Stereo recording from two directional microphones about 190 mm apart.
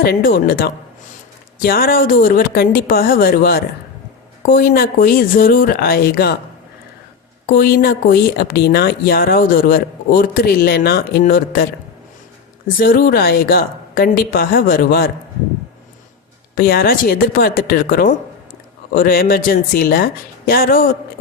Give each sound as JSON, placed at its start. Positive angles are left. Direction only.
{"t": 0.0, "sound": "speech", "side_deg": 50}
{"t": 7.4, "sound": "speech", "side_deg": 50}
{"t": 16.6, "sound": "speech", "side_deg": 50}